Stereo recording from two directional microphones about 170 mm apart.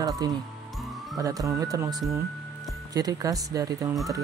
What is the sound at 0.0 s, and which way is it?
Speech, 20° right (ahead or behind).